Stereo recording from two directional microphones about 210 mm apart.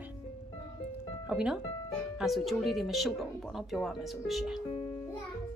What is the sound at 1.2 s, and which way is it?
Speech, 5° right (ahead or behind).